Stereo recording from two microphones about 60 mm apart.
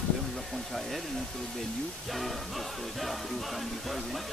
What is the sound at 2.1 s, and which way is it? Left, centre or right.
Music, centre.